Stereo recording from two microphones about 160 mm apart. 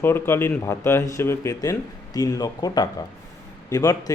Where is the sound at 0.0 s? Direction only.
15° left (ahead or behind).